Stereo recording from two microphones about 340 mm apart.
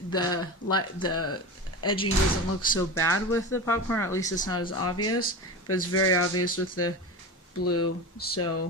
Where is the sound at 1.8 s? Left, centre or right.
Centre.